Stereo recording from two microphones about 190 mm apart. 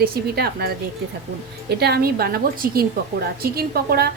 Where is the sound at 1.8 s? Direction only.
55° right (ahead or behind).